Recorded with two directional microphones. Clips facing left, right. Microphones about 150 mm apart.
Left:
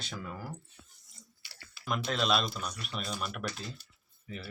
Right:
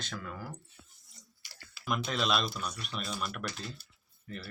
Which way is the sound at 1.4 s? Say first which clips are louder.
Right 1 dB; 45° right (ahead or behind).